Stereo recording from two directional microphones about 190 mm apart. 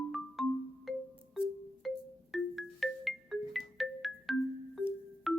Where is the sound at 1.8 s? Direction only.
Centre (ahead or behind).